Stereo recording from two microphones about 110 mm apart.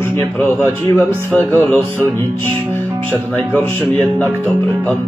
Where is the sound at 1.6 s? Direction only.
20° left (ahead or behind).